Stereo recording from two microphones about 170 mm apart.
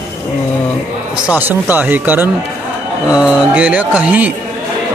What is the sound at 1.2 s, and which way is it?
Speech, 10° right (ahead or behind).